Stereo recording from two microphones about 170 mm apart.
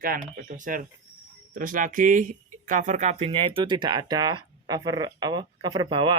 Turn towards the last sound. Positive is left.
turn(degrees=-30)  # may be behind; listen again after turning